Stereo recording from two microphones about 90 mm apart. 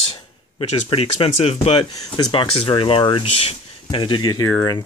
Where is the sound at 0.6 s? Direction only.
90° left; by 4.5 s 45° left (ahead or behind).